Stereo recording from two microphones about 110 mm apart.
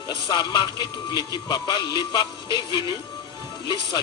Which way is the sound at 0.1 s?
40° left (ahead or behind).